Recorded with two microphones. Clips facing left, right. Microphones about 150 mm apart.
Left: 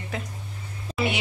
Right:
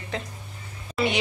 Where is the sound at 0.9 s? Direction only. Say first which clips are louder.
Right 2 dB; 30° left (ahead or behind).